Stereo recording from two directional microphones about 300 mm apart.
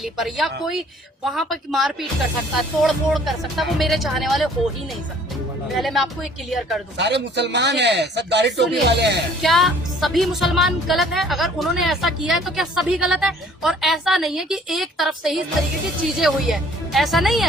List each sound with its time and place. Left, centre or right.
0.0 s speech: centre
5.7 s speech: centre
6.9 s a man's voice: right
9.4 s speech: centre